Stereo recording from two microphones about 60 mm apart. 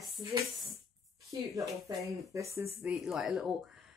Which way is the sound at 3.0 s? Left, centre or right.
Centre.